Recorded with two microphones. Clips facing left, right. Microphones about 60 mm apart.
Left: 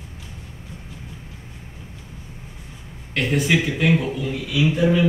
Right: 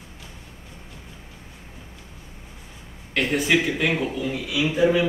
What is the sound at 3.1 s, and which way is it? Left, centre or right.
A man's voice, centre.